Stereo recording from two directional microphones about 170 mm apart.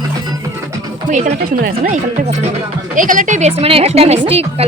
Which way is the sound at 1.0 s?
45° right (ahead or behind).